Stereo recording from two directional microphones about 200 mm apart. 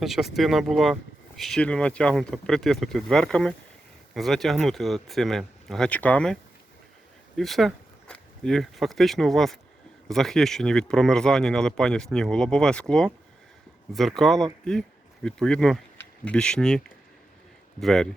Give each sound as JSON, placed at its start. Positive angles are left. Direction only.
{"t": 0.0, "sound": "speech", "side_deg": 0}
{"t": 13.9, "sound": "speech", "side_deg": 0}